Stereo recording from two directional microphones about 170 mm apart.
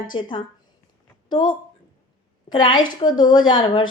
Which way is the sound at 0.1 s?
25° left (ahead or behind).